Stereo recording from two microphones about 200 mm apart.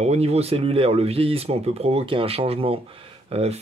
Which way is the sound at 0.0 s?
30° right (ahead or behind).